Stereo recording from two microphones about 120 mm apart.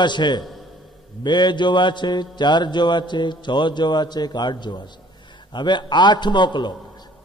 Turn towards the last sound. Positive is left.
turn(degrees=40)  # may be behind; listen again after turning